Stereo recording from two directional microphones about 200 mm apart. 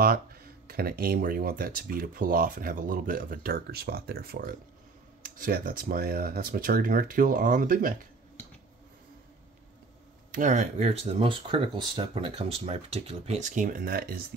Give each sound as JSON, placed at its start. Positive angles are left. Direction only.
{"t": 0.0, "sound": "speech", "side_deg": -50}
{"t": 10.3, "sound": "speech", "side_deg": -40}